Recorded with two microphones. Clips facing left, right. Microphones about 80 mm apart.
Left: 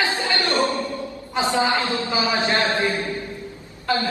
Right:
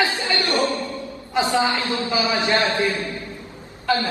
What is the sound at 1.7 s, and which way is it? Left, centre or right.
A man's voice, left.